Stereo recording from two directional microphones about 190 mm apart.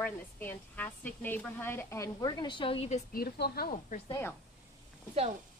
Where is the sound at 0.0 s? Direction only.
10° left (ahead or behind); by 3.0 s 30° left (ahead or behind).